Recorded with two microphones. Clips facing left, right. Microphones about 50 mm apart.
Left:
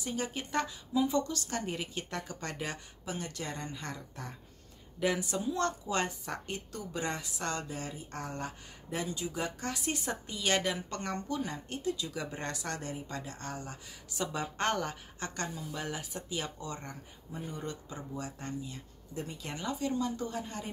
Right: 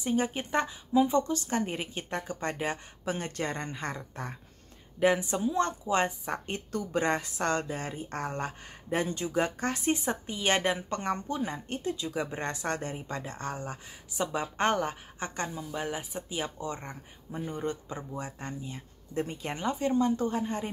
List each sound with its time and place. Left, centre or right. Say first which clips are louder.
0.0 s a woman's voice: right 7 dB; right
3.1 s speech: right 6 dB; right
5.0 s a woman's voice: right 6 dB; right
6.7 s speech: right 9 dB; right